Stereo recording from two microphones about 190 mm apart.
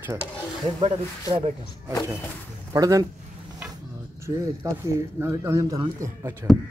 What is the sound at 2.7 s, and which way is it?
Speech, 20° right (ahead or behind).